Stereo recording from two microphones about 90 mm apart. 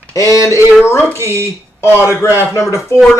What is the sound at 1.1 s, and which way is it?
Speech, 30° right (ahead or behind).